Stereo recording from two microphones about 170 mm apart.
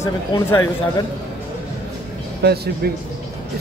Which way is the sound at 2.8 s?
70° right (ahead or behind).